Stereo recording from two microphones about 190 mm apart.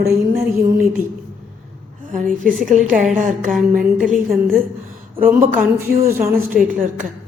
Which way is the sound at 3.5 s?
Centre (ahead or behind).